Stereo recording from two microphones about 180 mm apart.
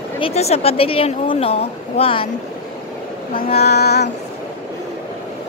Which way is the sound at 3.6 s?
65° left (ahead or behind).